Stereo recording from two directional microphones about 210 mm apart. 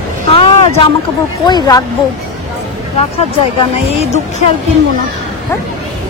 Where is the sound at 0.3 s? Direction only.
25° left (ahead or behind).